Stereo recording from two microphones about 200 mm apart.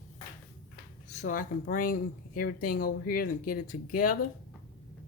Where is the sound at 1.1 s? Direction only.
40° left (ahead or behind).